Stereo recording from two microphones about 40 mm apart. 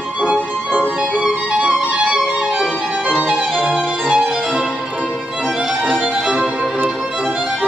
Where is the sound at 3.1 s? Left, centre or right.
Right.